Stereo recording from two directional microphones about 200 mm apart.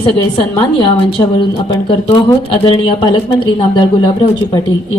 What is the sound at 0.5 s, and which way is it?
Speech, 20° left (ahead or behind).